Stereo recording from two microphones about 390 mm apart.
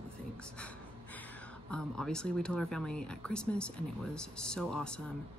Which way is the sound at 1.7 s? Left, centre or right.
Centre.